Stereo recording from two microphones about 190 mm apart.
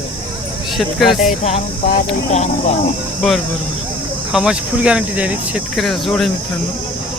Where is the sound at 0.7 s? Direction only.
Centre (ahead or behind).